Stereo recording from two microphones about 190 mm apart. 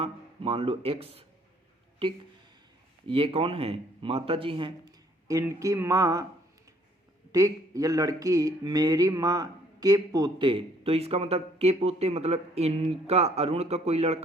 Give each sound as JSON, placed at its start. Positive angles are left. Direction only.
{"t": 0.0, "sound": "speech", "side_deg": -30}
{"t": 3.1, "sound": "speech", "side_deg": -30}
{"t": 7.3, "sound": "speech", "side_deg": -15}